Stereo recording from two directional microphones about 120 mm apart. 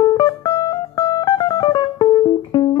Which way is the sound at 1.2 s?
40° left (ahead or behind).